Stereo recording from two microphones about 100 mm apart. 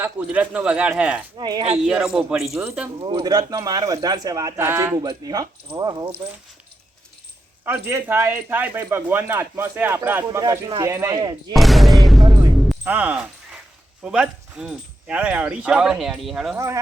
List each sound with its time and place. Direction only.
0.0 s speech: 15° right (ahead or behind)
1.4 s speech: 45° right (ahead or behind)
1.8 s a man's voice: 5° right (ahead or behind)
2.6 s speech: 20° right (ahead or behind)
3.0 s speech: 55° right (ahead or behind); by 4.5 s 35° right (ahead or behind)
4.5 s speech: 20° right (ahead or behind)
5.0 s speech: 35° right (ahead or behind)
7.6 s speech: 25° right (ahead or behind)
11.1 s speech: 45° right (ahead or behind)
11.5 s a man's voice: centre (ahead or behind)
12.8 s speech: 15° right (ahead or behind)